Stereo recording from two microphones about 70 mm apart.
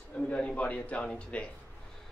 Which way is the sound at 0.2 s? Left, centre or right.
Centre.